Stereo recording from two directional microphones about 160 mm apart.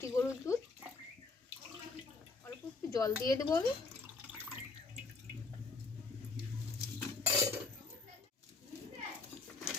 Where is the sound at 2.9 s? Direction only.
20° left (ahead or behind).